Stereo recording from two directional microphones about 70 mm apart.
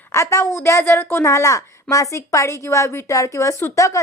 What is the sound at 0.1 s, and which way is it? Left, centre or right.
A woman's voice, left.